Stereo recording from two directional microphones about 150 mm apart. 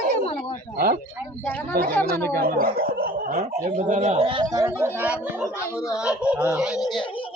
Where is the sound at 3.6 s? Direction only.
60° right (ahead or behind); by 6.8 s 5° right (ahead or behind).